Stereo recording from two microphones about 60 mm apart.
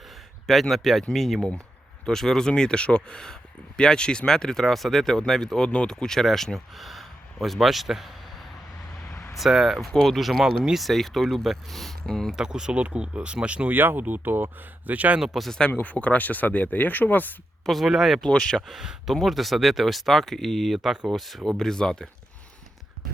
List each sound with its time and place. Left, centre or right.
0.4 s speech: centre
12.3 s speech: centre; by 15.2 s right
15.2 s speech: centre
15.7 s speech: left
17.7 s speech: centre
18.2 s speech: centre
18.8 s speech: centre
19.1 s speech: centre